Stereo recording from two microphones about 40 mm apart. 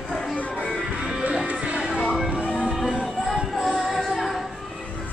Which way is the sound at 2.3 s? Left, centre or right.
Right.